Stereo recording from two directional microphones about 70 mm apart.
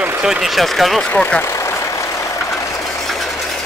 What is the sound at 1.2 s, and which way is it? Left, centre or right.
Speech, centre.